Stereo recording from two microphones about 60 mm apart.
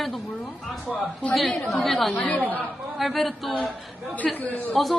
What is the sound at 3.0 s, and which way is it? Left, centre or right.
Speech, centre.